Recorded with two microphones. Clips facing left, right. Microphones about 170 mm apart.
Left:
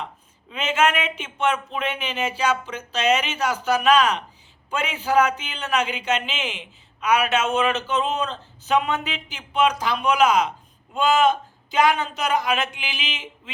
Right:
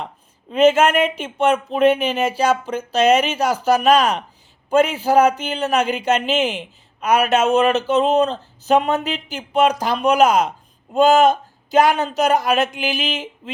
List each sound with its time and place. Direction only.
0.5 s a man's voice: 40° right (ahead or behind)